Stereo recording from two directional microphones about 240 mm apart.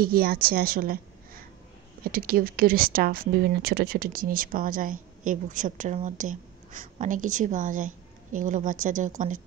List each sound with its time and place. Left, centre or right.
0.0 s a woman's voice: right